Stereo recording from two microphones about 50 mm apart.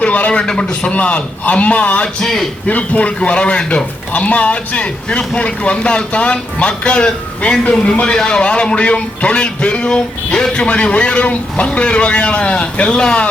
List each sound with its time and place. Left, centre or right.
0.0 s a man's voice: left
2.2 s a man's voice: centre
2.6 s a man's voice: left
4.1 s a man's voice: left